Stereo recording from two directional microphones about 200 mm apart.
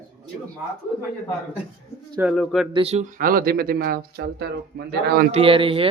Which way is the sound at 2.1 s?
10° right (ahead or behind).